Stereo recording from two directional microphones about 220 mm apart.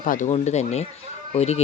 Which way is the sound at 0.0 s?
35° left (ahead or behind).